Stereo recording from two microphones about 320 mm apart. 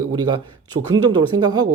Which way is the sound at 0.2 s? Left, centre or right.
Centre.